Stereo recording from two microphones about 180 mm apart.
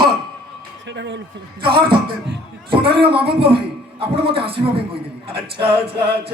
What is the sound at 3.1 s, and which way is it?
Music, 30° right (ahead or behind).